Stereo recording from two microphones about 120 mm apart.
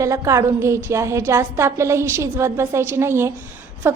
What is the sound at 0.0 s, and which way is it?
A woman's voice, 25° right (ahead or behind).